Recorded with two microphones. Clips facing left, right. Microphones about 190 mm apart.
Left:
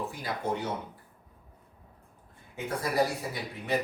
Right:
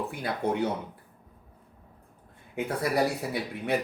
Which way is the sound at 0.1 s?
60° right (ahead or behind).